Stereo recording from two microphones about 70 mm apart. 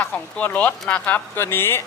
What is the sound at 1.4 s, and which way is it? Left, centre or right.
Speech, left.